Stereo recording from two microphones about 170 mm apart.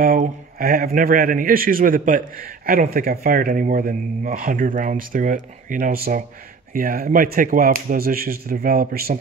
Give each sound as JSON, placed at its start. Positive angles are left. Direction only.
{"t": 0.0, "sound": "a man's voice", "side_deg": -55}